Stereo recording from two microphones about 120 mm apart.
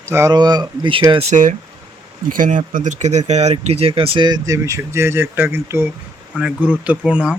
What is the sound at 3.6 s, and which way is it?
Speech, 55° right (ahead or behind).